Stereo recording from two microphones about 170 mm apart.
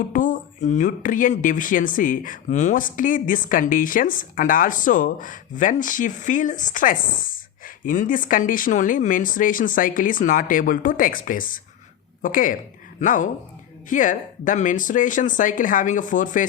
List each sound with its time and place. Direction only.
0.1 s speech: 50° left (ahead or behind)